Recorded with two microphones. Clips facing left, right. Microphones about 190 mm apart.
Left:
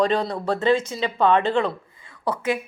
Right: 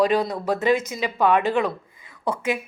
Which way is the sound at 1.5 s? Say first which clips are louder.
Even; 10° right (ahead or behind).